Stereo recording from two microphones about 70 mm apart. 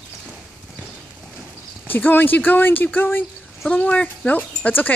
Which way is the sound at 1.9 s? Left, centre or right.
Left.